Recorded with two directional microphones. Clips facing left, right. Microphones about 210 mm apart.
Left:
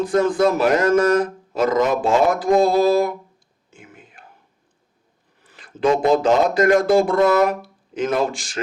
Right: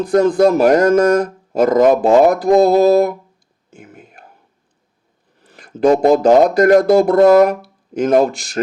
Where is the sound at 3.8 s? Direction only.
45° right (ahead or behind).